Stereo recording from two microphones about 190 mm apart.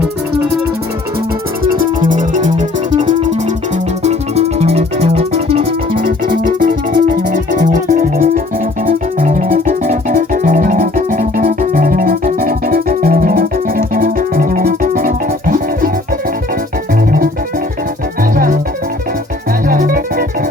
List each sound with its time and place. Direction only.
1.6 s music: 50° right (ahead or behind); by 5.6 s 35° right (ahead or behind)
6.0 s music: 45° right (ahead or behind)
19.6 s music: 50° right (ahead or behind)